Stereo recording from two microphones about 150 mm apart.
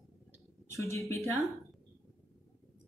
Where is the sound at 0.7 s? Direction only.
20° left (ahead or behind).